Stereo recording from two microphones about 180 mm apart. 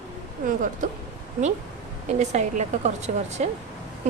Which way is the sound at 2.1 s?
40° right (ahead or behind).